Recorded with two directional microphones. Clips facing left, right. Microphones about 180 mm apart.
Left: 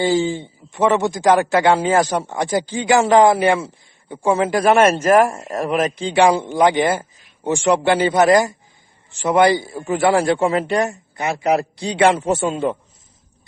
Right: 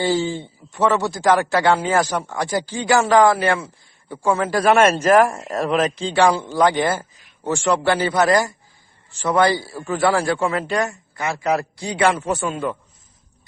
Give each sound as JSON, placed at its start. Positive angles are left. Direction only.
{"t": 0.0, "sound": "a man's voice", "side_deg": 15}